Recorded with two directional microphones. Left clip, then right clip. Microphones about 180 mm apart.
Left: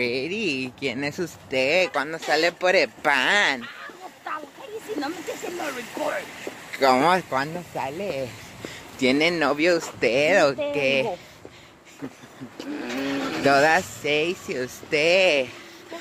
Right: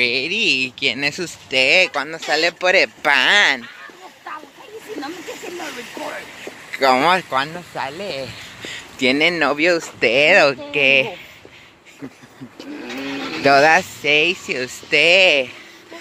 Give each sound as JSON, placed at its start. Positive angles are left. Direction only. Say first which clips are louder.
{"t": 0.0, "sound": "speech", "louder": "right 8 dB", "side_deg": 0}
{"t": 5.0, "sound": "a sound", "louder": "right 1 dB", "side_deg": 25}
{"t": 6.8, "sound": "speech", "louder": "right 4 dB", "side_deg": 0}
{"t": 8.7, "sound": "speech", "louder": "right 4 dB", "side_deg": -5}
{"t": 12.8, "sound": "a sound", "louder": "right 1 dB", "side_deg": 65}
{"t": 13.4, "sound": "speech", "louder": "right 6 dB", "side_deg": -30}